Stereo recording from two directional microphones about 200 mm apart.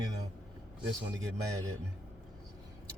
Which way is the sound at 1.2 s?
15° right (ahead or behind).